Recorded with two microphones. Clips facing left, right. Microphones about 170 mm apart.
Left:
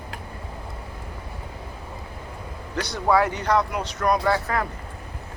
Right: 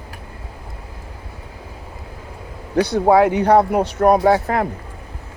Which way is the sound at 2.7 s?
55° right (ahead or behind).